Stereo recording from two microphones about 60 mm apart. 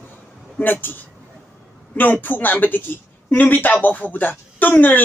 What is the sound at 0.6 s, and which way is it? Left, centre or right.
Speech, left.